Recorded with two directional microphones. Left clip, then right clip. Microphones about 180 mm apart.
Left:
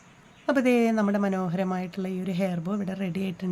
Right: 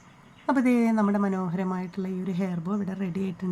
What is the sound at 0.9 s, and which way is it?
Speech, 25° left (ahead or behind).